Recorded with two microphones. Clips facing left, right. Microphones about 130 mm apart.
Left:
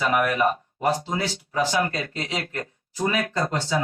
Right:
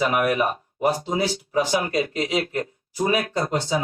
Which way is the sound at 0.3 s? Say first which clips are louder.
Left 1 dB; 15° right (ahead or behind).